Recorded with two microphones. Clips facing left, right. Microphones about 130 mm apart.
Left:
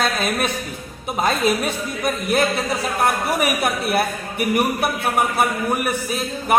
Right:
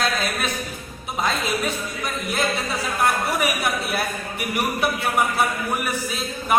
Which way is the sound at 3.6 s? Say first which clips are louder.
Left 4 dB; 55° left (ahead or behind).